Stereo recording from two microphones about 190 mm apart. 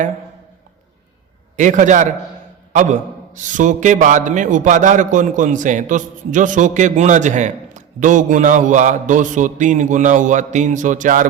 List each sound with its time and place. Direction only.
1.5 s a man's voice: 40° right (ahead or behind)